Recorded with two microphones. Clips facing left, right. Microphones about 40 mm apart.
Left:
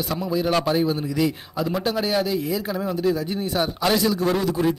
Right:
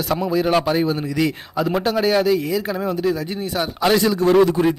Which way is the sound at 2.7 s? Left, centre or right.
Right.